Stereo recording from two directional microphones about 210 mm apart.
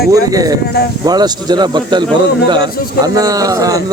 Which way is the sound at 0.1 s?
15° right (ahead or behind).